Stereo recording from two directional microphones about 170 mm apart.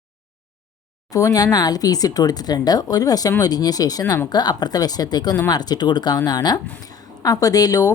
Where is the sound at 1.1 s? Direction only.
20° left (ahead or behind).